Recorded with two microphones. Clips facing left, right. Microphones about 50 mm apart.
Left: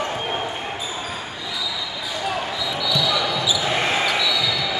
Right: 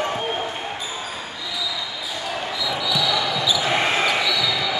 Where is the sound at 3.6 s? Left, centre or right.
Centre.